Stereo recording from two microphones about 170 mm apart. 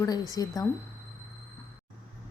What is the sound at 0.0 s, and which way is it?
Speech, 20° left (ahead or behind).